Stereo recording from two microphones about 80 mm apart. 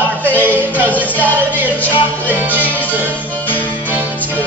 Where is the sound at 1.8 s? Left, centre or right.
Right.